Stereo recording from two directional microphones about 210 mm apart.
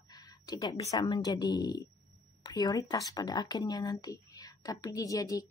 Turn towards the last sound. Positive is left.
turn(degrees=15)  # may be behind; listen again after turning